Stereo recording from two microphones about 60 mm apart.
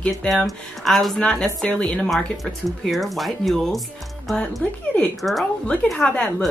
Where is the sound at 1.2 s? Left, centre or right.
Centre.